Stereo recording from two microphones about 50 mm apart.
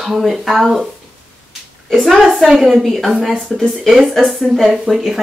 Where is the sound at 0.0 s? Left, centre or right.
Centre.